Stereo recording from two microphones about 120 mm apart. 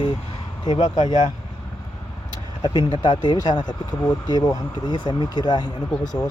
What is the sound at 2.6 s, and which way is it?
Speech, 40° left (ahead or behind).